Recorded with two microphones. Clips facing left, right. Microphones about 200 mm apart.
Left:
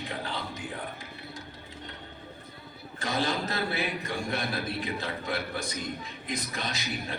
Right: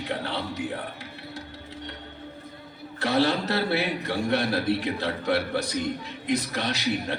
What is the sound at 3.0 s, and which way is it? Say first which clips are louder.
Speech: right 6 dB; 70° right (ahead or behind).